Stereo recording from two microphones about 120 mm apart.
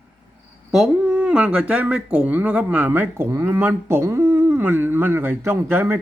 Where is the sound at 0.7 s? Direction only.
5° right (ahead or behind).